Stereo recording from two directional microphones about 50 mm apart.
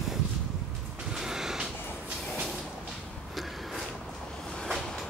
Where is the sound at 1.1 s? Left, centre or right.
Centre.